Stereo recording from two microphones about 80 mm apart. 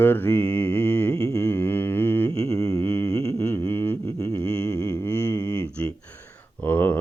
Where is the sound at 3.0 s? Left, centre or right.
Left.